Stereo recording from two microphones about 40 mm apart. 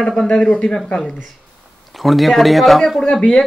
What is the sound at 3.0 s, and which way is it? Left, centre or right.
Speech, left.